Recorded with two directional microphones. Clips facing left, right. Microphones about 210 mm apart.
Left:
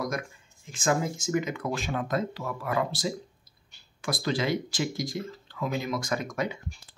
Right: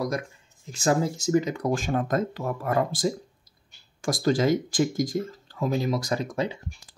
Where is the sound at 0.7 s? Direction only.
35° right (ahead or behind).